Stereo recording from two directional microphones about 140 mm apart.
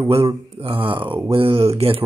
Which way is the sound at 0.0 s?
35° right (ahead or behind).